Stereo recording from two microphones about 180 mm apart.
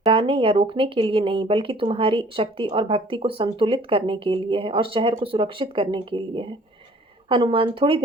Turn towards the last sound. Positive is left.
turn(degrees=-30)  # may be behind; listen again after turning